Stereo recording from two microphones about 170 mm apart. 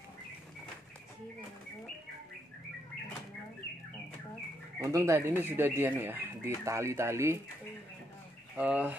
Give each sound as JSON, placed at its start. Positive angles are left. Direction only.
{"t": 4.7, "sound": "speech", "side_deg": -20}
{"t": 8.5, "sound": "speech", "side_deg": -10}